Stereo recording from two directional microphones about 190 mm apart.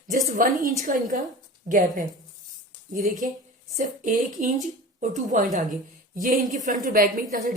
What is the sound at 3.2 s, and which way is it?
A woman's voice, 45° right (ahead or behind).